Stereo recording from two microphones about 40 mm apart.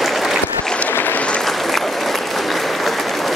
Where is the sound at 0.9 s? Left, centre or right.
Left.